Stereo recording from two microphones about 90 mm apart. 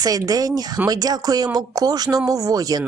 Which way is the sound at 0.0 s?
45° right (ahead or behind).